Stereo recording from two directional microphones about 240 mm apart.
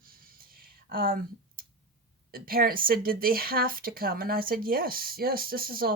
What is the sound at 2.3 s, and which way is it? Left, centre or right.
A woman's voice, right.